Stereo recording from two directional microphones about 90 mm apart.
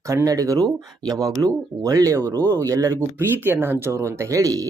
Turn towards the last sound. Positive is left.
turn(degrees=-40)  # may be behind; listen again after turning